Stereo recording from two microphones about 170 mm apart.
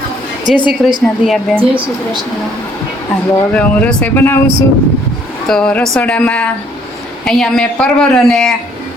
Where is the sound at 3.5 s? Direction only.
5° left (ahead or behind).